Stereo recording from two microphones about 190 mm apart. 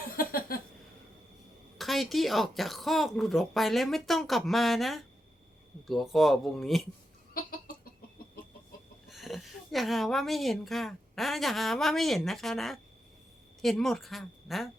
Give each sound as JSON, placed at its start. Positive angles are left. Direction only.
{"t": 0.2, "sound": "a sound", "side_deg": 50}
{"t": 1.8, "sound": "speech", "side_deg": 0}
{"t": 9.0, "sound": "a woman's voice", "side_deg": 0}